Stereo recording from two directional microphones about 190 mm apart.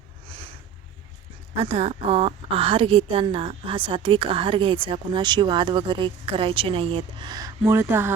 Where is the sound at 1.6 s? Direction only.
35° right (ahead or behind).